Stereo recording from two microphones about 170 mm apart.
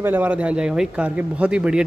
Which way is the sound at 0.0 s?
10° right (ahead or behind).